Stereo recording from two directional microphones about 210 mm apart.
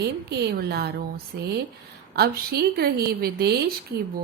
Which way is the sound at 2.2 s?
50° right (ahead or behind).